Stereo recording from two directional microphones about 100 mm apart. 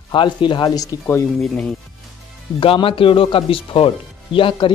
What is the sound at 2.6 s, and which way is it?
Speech, 65° left (ahead or behind).